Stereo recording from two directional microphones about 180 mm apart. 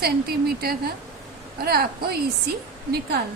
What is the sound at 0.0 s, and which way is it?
A woman's voice, 60° right (ahead or behind).